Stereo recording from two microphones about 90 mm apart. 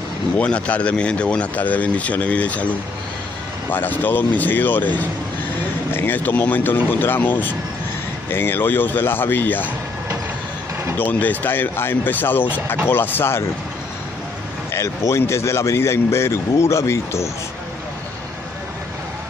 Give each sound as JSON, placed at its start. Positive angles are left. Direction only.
{"t": 0.4, "sound": "speech", "side_deg": 15}
{"t": 3.7, "sound": "speech", "side_deg": 20}
{"t": 11.0, "sound": "speech", "side_deg": 20}
{"t": 14.7, "sound": "a man's voice", "side_deg": 30}